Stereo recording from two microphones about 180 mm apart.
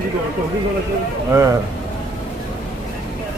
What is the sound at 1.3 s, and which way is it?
Speech, 15° right (ahead or behind).